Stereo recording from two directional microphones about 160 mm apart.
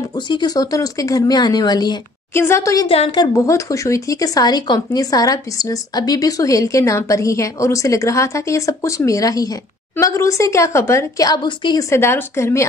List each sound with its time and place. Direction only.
0.1 s speech: 25° left (ahead or behind)
2.9 s a woman's voice: 35° left (ahead or behind)
3.3 s speech: 20° left (ahead or behind)
11.9 s speech: 15° left (ahead or behind)